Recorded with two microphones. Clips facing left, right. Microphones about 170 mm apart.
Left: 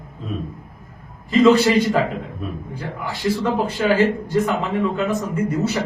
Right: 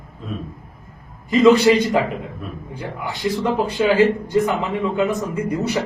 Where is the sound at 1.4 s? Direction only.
20° right (ahead or behind).